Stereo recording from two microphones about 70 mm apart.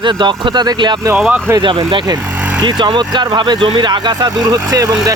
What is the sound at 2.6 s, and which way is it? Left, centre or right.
Speech, right.